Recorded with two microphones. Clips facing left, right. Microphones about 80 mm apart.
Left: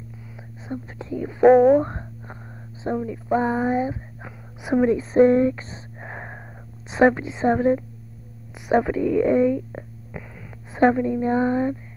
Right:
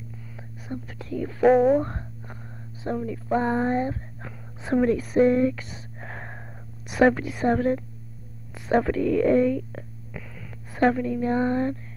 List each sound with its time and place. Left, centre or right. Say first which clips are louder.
0.7 s speech: left 3 dB; left
1.5 s speech: left 4 dB; centre
1.8 s a sound: left 3 dB; left
2.8 s speech: left 3 dB; centre
5.1 s speech: left 5 dB; left
5.9 s a sound: left 3 dB; centre
7.2 s a woman's voice: left 2 dB; left